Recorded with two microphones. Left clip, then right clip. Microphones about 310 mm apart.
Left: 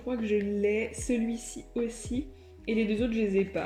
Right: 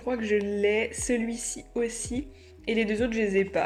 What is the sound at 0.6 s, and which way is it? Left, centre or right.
Speech, right.